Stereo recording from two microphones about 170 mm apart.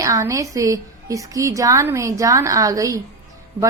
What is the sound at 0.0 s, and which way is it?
A woman's voice, 20° right (ahead or behind).